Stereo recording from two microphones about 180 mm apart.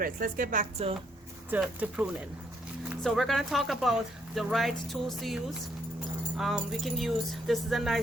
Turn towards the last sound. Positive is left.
turn(degrees=0)  # may be behind; listen again after turning